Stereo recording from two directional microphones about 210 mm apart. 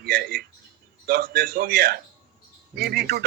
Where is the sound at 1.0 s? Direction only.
45° right (ahead or behind).